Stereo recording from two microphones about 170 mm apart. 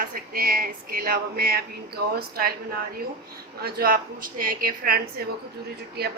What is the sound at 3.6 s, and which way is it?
A woman's voice, 65° right (ahead or behind).